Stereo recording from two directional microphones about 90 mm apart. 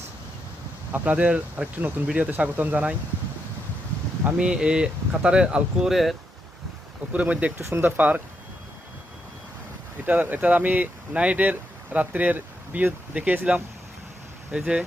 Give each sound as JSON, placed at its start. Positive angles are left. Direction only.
{"t": 0.9, "sound": "speech", "side_deg": -15}
{"t": 4.2, "sound": "speech", "side_deg": -10}
{"t": 7.1, "sound": "speech", "side_deg": -15}
{"t": 7.6, "sound": "speech", "side_deg": -25}
{"t": 10.1, "sound": "speech", "side_deg": -20}